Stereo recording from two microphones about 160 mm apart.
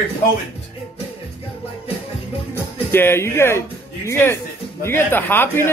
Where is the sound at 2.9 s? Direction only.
15° left (ahead or behind).